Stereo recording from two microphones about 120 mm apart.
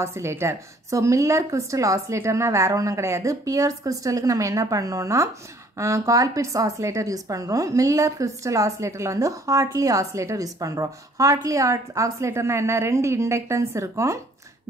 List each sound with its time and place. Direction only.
0.0 s a woman's voice: 25° right (ahead or behind)